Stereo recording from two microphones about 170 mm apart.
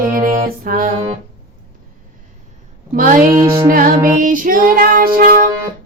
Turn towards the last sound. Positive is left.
turn(degrees=-60)  # may be behind; listen again after turning